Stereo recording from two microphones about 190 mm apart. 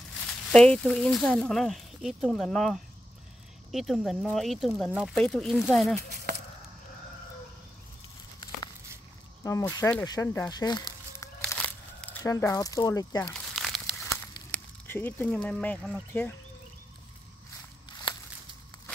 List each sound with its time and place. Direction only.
0.5 s speech: 5° left (ahead or behind)
9.4 s speech: 15° left (ahead or behind)
11.4 s a sound: 5° left (ahead or behind)
13.2 s crumpling: 5° left (ahead or behind)
14.5 s speech: 10° left (ahead or behind)
17.8 s walk: 20° left (ahead or behind)